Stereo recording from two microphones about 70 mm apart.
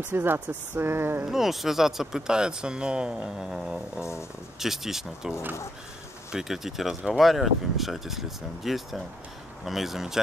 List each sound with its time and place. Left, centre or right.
0.0 s speech: right
1.2 s speech: centre
4.0 s speech: left
4.6 s speech: centre
6.3 s speech: centre